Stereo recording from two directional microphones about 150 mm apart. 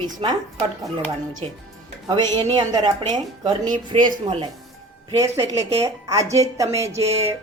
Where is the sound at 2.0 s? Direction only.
30° right (ahead or behind).